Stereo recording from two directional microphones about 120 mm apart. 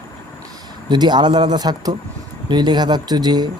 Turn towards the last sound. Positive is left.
turn(degrees=-35)  # may be behind; listen again after turning